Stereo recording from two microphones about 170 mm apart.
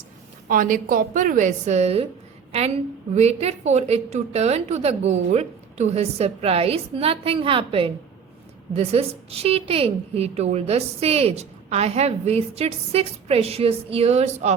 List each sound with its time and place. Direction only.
0.4 s a woman's voice: 50° right (ahead or behind)